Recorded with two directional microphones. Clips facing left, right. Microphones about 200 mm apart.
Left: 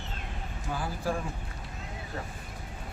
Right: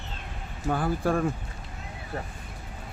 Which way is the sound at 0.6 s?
60° right (ahead or behind).